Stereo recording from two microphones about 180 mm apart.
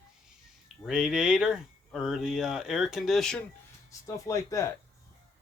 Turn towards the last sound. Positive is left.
turn(degrees=15)  # may be behind; listen again after turning